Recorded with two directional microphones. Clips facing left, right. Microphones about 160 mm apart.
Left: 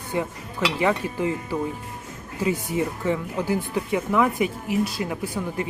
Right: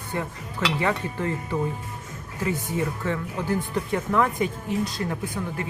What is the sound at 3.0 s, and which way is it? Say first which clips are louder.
Speech: left 3 dB; 15° left (ahead or behind).